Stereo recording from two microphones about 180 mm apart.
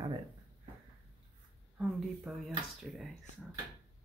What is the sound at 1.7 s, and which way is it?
Speech, 5° right (ahead or behind).